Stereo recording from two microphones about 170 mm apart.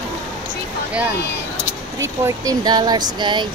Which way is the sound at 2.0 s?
20° right (ahead or behind).